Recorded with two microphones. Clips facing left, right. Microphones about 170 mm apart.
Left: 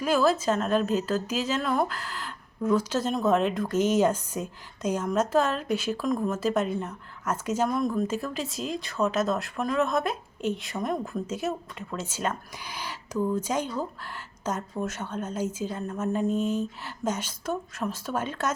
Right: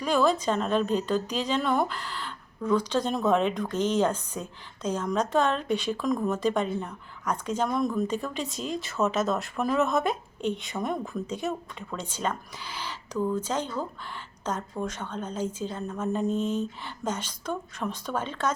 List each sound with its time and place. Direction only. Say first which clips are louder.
0.0 s a woman's voice: left 1 dB; 5° left (ahead or behind)